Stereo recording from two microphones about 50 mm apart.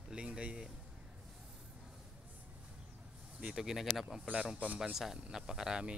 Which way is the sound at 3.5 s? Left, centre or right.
Centre.